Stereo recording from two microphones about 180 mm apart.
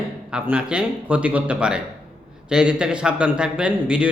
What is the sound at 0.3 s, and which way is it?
A man's voice, 5° right (ahead or behind).